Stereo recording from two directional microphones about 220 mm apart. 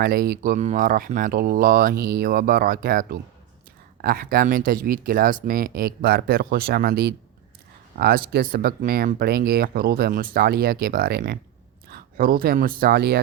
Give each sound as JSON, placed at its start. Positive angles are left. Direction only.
{"t": 0.0, "sound": "speech", "side_deg": -40}